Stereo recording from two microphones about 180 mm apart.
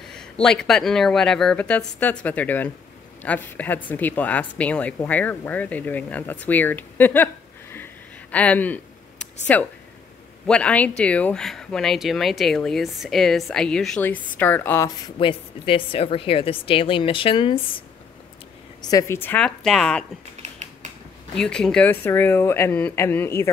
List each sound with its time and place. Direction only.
0.0 s speech: 5° left (ahead or behind)
7.7 s a sound: 10° left (ahead or behind)
9.5 s speech: 10° left (ahead or behind)
15.0 s a woman's voice: 30° left (ahead or behind); by 20.1 s 5° left (ahead or behind)
21.4 s speech: 5° left (ahead or behind)